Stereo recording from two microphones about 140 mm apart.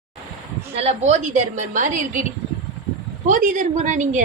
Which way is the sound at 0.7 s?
50° right (ahead or behind).